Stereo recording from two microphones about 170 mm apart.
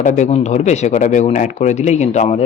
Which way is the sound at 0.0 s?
45° left (ahead or behind).